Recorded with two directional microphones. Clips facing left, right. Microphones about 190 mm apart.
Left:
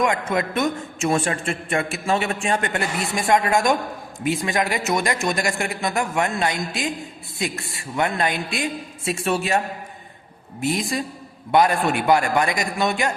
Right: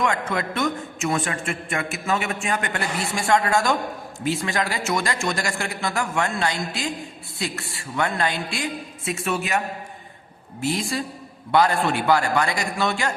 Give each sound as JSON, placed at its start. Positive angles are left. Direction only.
{"t": 0.0, "sound": "a man's voice", "side_deg": 20}
{"t": 10.6, "sound": "a man's voice", "side_deg": 20}